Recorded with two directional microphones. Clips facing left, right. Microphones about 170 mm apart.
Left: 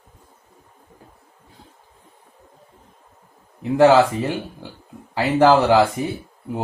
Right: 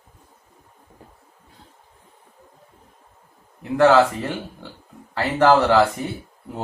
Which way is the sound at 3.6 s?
20° left (ahead or behind).